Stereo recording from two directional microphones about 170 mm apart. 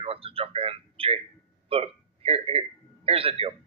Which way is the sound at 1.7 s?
35° right (ahead or behind).